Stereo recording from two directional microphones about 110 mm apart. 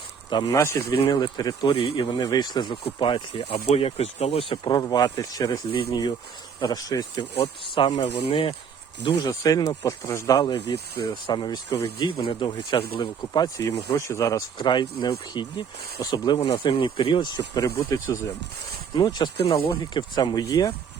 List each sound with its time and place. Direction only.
0.3 s speech: 45° left (ahead or behind)
0.5 s speech: 30° left (ahead or behind)
1.6 s speech: 60° left (ahead or behind)
4.8 s speech: 35° left (ahead or behind)
5.7 s speech: 50° left (ahead or behind)
6.6 s speech: 35° left (ahead or behind)
7.8 s speech: 50° left (ahead or behind)
8.0 s speech: 65° left (ahead or behind)
9.0 s speech: 40° left (ahead or behind)
12.0 s speech: 50° left (ahead or behind); by 14.4 s 30° left (ahead or behind)
14.6 s speech: 45° left (ahead or behind); by 18.3 s 25° left (ahead or behind)
18.9 s speech: 40° left (ahead or behind)